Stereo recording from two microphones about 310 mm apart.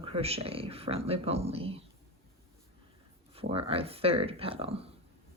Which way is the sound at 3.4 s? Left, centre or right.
Centre.